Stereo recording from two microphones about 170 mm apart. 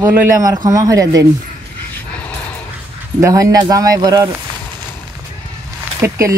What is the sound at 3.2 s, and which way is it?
A man's voice, 20° right (ahead or behind).